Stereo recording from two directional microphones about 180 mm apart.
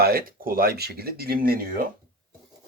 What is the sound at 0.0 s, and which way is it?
Speech, 55° right (ahead or behind).